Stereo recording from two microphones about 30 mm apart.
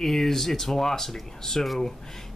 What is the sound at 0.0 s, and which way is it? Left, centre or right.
Speech, centre.